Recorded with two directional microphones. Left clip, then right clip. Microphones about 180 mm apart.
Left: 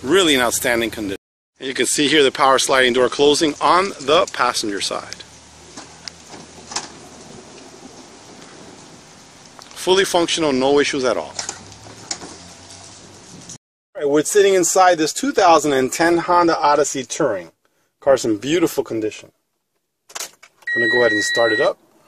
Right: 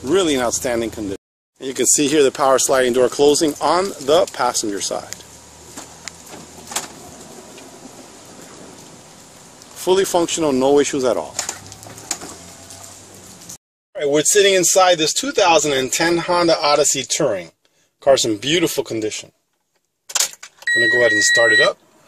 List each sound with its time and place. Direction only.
0.0 s speech: centre (ahead or behind)
9.8 s speech: 5° right (ahead or behind)
13.9 s speech: centre (ahead or behind)
14.6 s speech: 15° left (ahead or behind)
16.2 s speech: 5° left (ahead or behind)
20.3 s vehicle: centre (ahead or behind)
21.2 s speech: 10° left (ahead or behind)